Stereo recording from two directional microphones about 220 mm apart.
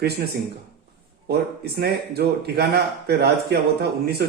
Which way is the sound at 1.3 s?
45° right (ahead or behind).